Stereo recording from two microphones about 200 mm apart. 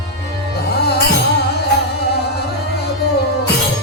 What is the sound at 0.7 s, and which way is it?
Music, 55° left (ahead or behind).